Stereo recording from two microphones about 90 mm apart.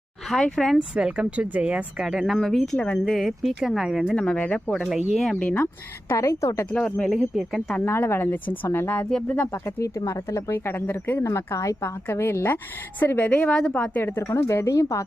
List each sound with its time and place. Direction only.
0.3 s speech: 5° left (ahead or behind)
0.9 s a woman's voice: 10° right (ahead or behind); by 3.0 s 15° left (ahead or behind)
3.0 s speech: centre (ahead or behind)
4.2 s a woman's voice: 15° left (ahead or behind)
4.7 s speech: 5° right (ahead or behind)
6.1 s speech: 35° left (ahead or behind)
6.7 s a woman's voice: 10° left (ahead or behind)
7.1 s speech: centre (ahead or behind)
7.9 s a woman's voice: 25° left (ahead or behind)
9.0 s speech: 5° left (ahead or behind)
9.5 s speech: 30° left (ahead or behind)
11.2 s a woman's voice: 35° left (ahead or behind); by 14.0 s 15° left (ahead or behind)
14.0 s speech: 30° left (ahead or behind)